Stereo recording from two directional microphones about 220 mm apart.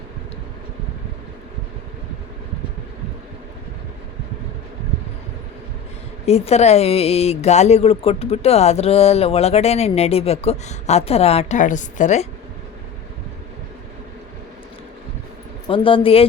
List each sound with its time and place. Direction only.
6.2 s speech: 30° left (ahead or behind)
15.6 s speech: 25° left (ahead or behind)